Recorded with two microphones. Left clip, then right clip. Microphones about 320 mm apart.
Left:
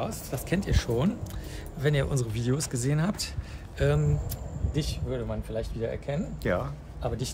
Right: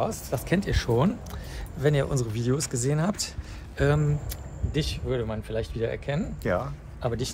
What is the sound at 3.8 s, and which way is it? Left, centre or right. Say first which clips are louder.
Speech: right 2 dB; centre.